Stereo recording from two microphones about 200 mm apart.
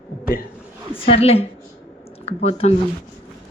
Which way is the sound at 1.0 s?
30° left (ahead or behind).